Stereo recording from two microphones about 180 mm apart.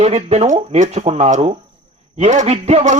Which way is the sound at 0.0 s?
35° right (ahead or behind).